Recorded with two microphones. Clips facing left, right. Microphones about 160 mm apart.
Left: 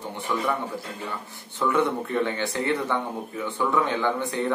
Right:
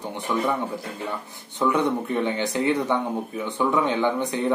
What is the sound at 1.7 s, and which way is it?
Speech, 20° right (ahead or behind).